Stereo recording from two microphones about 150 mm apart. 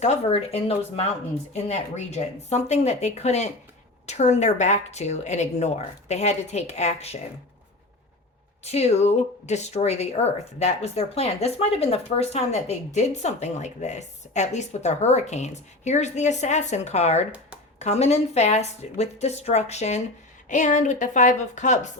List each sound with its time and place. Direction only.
0.0 s speech: 45° left (ahead or behind)
8.6 s a woman's voice: 45° left (ahead or behind)